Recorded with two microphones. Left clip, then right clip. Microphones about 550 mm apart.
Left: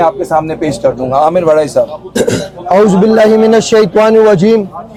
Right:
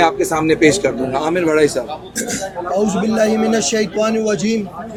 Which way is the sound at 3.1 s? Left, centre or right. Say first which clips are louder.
Left 8 dB; left.